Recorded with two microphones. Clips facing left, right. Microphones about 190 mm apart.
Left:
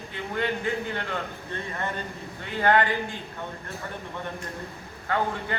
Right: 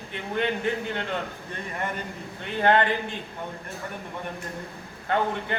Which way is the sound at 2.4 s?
20° right (ahead or behind).